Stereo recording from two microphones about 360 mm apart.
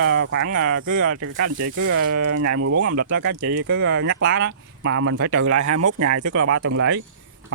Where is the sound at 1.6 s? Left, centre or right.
Right.